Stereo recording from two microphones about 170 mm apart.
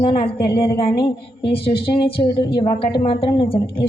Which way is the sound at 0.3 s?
65° left (ahead or behind).